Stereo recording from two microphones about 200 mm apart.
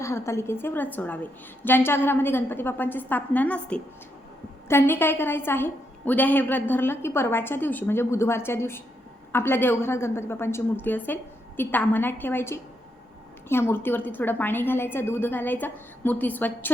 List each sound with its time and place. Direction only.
0.0 s a woman's voice: 15° left (ahead or behind)